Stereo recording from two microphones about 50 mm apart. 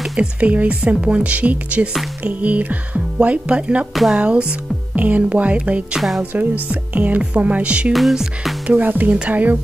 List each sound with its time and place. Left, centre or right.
0.2 s speech: right
5.9 s speech: centre
6.3 s speech: right
7.9 s speech: centre
8.6 s speech: right